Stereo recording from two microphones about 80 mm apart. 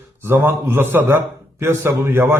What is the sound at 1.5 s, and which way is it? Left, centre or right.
Speech, right.